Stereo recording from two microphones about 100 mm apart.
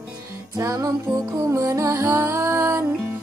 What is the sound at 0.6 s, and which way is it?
Music, 35° right (ahead or behind).